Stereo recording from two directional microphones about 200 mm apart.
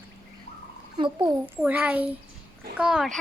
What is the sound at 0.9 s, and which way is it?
Speech, 25° right (ahead or behind).